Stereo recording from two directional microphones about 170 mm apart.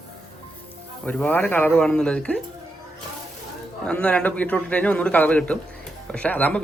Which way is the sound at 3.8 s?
5° left (ahead or behind).